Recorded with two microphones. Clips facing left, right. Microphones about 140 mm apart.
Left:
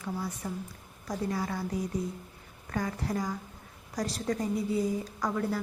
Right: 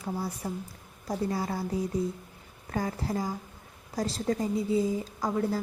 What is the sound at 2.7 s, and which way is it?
A woman's voice, 30° right (ahead or behind).